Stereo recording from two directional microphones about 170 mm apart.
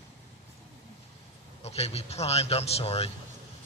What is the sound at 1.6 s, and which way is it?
A man's voice, 40° left (ahead or behind).